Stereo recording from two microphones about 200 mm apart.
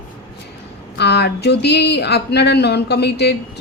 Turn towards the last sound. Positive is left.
turn(degrees=55)  # may be behind; listen again after turning